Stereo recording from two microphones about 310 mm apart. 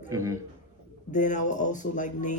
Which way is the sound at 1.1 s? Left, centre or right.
Left.